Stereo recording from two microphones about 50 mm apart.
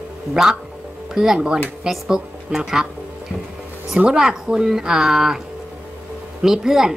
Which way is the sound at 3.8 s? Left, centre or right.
Centre.